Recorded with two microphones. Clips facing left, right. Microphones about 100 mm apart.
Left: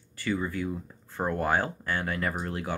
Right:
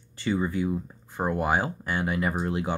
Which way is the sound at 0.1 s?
25° right (ahead or behind).